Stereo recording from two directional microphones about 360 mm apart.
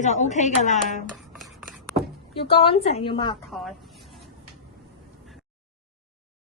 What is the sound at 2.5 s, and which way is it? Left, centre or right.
Speech, centre.